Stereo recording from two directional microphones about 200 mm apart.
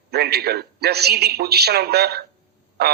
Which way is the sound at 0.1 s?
55° right (ahead or behind).